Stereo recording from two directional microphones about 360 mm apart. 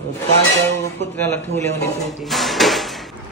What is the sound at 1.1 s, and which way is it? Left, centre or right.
A man's voice, centre.